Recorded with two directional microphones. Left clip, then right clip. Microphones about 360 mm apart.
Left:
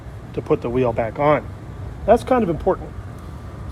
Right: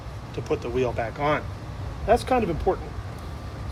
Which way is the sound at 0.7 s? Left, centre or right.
Centre.